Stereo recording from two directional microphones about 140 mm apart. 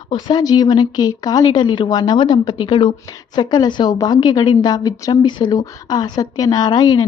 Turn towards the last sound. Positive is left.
turn(degrees=25)  # may be behind; listen again after turning